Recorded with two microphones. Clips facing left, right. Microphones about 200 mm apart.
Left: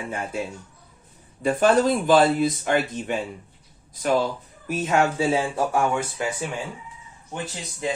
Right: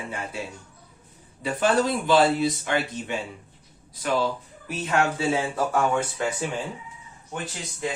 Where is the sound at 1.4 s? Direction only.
50° left (ahead or behind).